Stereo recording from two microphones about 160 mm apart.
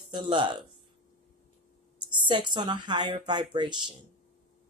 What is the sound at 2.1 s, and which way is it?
Speech, 30° right (ahead or behind).